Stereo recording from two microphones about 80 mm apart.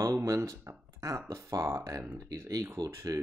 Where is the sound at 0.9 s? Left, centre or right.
Right.